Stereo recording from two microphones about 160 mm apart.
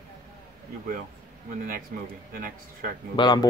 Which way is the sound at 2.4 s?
60° right (ahead or behind).